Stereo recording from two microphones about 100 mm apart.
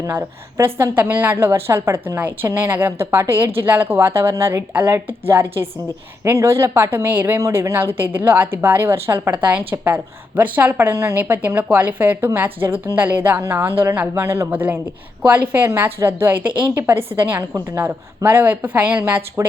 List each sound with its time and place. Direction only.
0.1 s a woman's voice: 25° right (ahead or behind)